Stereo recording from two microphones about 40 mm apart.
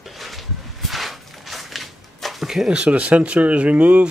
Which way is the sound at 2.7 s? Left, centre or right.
Right.